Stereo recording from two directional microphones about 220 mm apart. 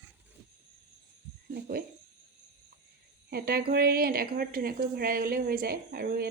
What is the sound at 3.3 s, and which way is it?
A woman's voice, 45° right (ahead or behind).